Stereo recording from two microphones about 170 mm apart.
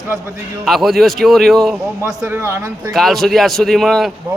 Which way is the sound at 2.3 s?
15° right (ahead or behind).